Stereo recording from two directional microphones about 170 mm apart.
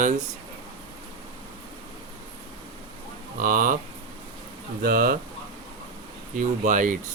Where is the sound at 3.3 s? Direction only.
50° right (ahead or behind).